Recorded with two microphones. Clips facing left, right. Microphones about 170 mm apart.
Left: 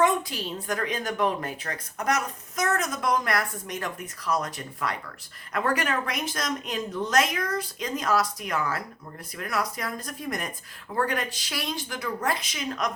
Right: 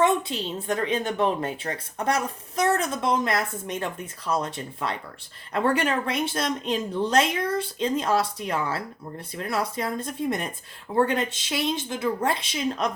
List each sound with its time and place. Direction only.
0.0 s a woman's voice: 25° right (ahead or behind)